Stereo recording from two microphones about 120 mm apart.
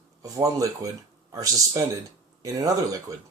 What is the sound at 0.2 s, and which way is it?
Speech, 30° right (ahead or behind).